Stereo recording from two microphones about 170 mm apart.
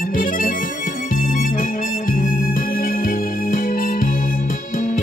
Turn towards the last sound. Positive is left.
turn(degrees=45)  # may be behind; listen again after turning